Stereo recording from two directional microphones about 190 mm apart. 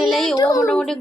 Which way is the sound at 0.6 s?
5° left (ahead or behind).